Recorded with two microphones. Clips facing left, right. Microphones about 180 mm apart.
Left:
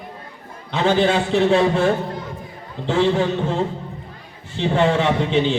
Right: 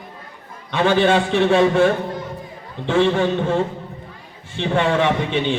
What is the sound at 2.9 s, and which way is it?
A man's voice, 60° right (ahead or behind).